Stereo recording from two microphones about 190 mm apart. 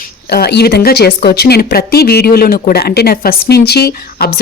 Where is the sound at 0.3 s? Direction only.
55° left (ahead or behind).